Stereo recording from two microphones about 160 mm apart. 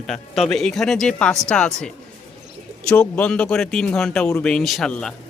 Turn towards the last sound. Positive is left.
turn(degrees=5)  # may be behind; listen again after turning